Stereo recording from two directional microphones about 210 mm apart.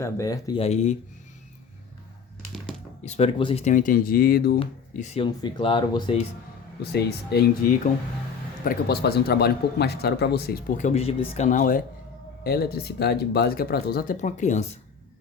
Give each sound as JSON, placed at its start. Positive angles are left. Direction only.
{"t": 0.0, "sound": "speech", "side_deg": 15}
{"t": 0.6, "sound": "speech", "side_deg": 35}
{"t": 3.0, "sound": "speech", "side_deg": 30}
{"t": 4.6, "sound": "speech", "side_deg": 30}
{"t": 6.9, "sound": "speech", "side_deg": 50}
{"t": 8.6, "sound": "speech", "side_deg": 50}